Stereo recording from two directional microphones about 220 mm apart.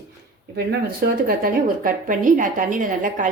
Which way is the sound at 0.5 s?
40° right (ahead or behind).